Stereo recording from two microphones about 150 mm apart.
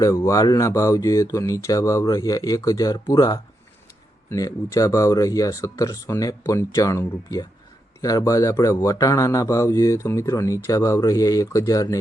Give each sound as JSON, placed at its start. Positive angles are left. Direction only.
{"t": 0.0, "sound": "speech", "side_deg": 20}